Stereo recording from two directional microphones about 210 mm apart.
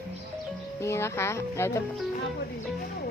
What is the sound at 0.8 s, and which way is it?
Speech, 15° left (ahead or behind).